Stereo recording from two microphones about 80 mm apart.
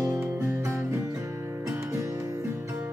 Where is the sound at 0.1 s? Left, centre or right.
Centre.